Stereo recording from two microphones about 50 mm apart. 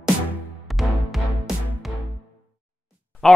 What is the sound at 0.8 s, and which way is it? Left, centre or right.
Music, centre.